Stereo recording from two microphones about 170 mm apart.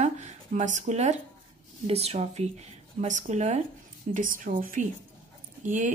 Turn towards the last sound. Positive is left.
turn(degrees=-45)  # may be behind; listen again after turning